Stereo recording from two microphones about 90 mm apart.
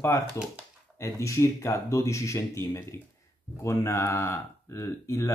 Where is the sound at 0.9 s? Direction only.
35° left (ahead or behind).